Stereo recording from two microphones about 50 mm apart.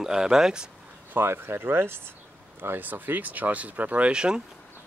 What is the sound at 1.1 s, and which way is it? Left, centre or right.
Speech, right.